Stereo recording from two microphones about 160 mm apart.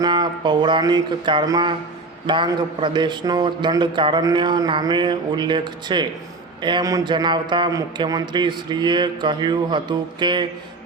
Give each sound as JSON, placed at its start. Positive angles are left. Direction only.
{"t": 0.0, "sound": "a man's voice", "side_deg": -30}